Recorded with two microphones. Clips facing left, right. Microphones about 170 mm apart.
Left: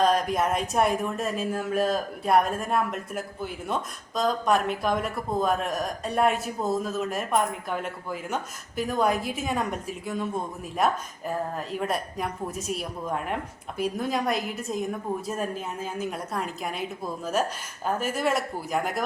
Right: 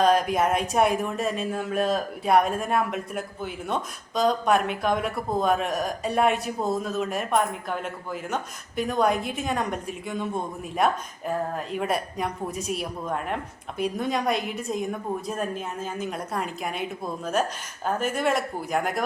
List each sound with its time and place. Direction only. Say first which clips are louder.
0.0 s speech: right 2 dB; centre (ahead or behind)